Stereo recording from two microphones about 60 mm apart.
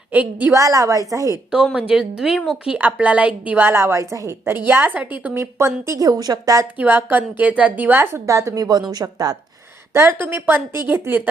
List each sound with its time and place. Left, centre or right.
0.1 s a woman's voice: right
0.5 s a woman's voice: right
1.5 s speech: centre
2.7 s a woman's voice: right
3.7 s a woman's voice: right
4.4 s a woman's voice: right
4.9 s a woman's voice: right
5.5 s a woman's voice: right
6.0 s a woman's voice: right
6.7 s a woman's voice: right
8.3 s speech: right
8.5 s a woman's voice: right
9.9 s a woman's voice: right